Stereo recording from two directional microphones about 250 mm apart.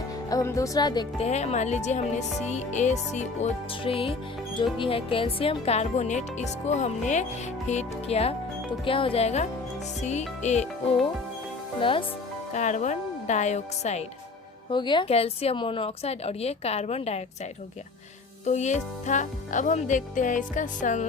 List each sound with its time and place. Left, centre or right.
0.3 s speech: centre
11.8 s speech: left
18.4 s speech: left